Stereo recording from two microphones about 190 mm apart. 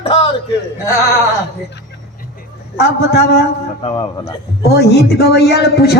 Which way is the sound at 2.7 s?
60° left (ahead or behind).